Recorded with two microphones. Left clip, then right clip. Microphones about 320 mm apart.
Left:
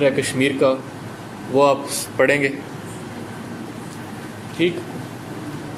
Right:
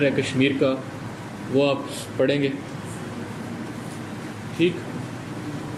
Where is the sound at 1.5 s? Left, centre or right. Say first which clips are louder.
Left 6 dB; left.